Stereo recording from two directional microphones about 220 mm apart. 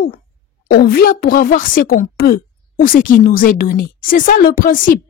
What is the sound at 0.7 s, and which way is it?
A woman's voice, 45° left (ahead or behind).